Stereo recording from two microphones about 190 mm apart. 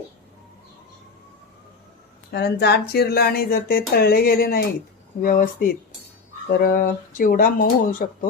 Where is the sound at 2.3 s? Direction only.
60° left (ahead or behind).